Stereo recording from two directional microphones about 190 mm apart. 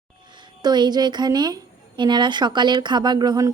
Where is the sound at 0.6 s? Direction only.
20° right (ahead or behind).